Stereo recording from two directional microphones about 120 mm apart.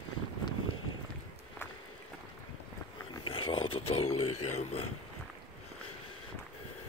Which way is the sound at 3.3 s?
45° left (ahead or behind).